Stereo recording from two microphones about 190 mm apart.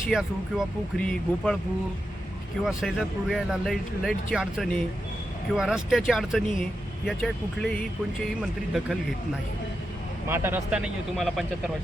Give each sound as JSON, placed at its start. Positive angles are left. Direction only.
{"t": 0.1, "sound": "speech", "side_deg": 0}
{"t": 2.6, "sound": "speech", "side_deg": 0}
{"t": 10.2, "sound": "speech", "side_deg": -10}